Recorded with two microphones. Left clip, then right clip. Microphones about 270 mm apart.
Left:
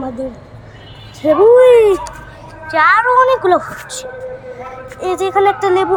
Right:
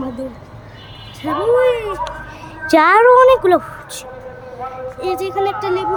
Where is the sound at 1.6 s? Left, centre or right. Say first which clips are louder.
Left 9 dB; centre.